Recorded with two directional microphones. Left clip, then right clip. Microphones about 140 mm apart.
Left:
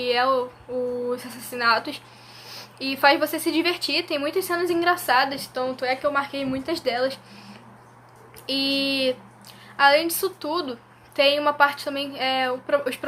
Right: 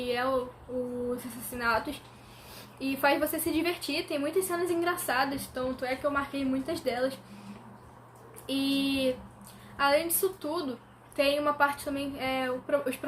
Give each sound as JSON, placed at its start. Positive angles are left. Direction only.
{"t": 0.0, "sound": "a sound", "side_deg": 20}
{"t": 1.1, "sound": "a woman's voice", "side_deg": 20}
{"t": 8.4, "sound": "a woman's voice", "side_deg": 20}